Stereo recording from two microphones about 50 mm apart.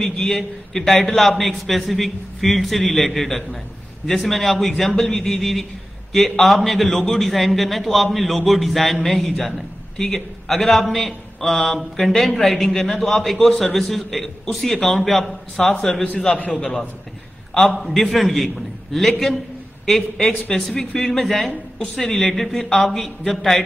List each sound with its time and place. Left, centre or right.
0.0 s a man's voice: centre
17.7 s a man's voice: centre